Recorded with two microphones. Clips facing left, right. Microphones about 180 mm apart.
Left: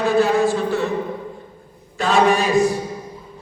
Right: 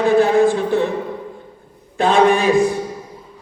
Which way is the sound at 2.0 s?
55° right (ahead or behind).